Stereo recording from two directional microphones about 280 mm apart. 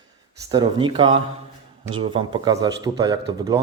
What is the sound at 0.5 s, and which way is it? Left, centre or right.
A man's voice, centre.